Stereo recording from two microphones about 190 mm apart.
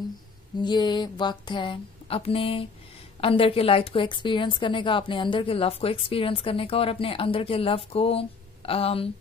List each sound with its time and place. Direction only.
0.6 s a woman's voice: 25° left (ahead or behind)